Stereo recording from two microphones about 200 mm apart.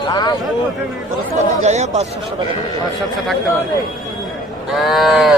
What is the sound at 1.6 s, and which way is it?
Speech, 35° right (ahead or behind).